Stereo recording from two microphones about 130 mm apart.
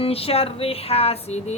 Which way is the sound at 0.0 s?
50° left (ahead or behind).